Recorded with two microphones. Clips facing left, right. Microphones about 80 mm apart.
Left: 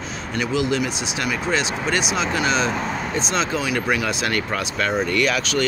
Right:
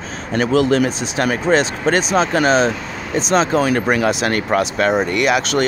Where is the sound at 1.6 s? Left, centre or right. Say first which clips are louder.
Right 6 dB; right.